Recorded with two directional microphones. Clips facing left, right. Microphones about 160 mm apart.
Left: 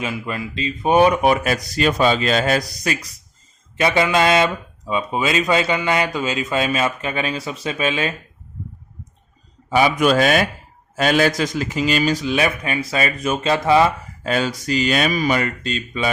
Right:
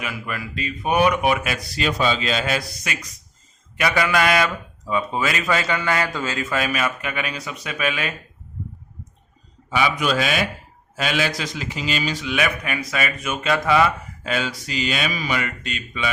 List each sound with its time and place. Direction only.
0.0 s a man's voice: 25° left (ahead or behind)
9.6 s a man's voice: 40° left (ahead or behind)